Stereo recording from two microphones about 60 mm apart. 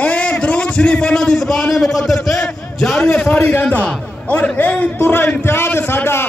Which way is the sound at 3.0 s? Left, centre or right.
Centre.